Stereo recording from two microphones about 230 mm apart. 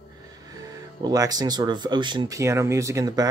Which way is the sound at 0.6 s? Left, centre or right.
Centre.